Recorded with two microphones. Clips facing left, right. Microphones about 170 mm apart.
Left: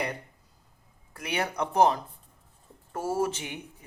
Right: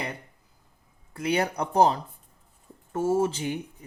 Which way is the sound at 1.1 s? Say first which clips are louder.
Right 5 dB; 30° right (ahead or behind).